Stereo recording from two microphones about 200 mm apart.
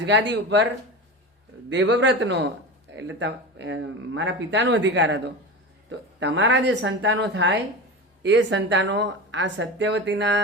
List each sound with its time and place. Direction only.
0.0 s speech: 60° right (ahead or behind)
1.7 s speech: 65° right (ahead or behind)